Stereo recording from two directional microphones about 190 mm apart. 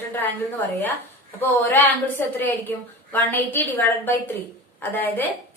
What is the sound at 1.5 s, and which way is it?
A woman's voice, 10° left (ahead or behind).